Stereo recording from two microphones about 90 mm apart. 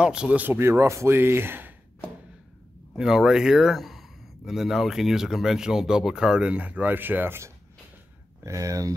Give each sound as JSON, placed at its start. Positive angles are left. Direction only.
{"t": 0.0, "sound": "speech", "side_deg": -10}
{"t": 0.6, "sound": "speech", "side_deg": -30}
{"t": 3.0, "sound": "speech", "side_deg": -5}
{"t": 8.5, "sound": "speech", "side_deg": -40}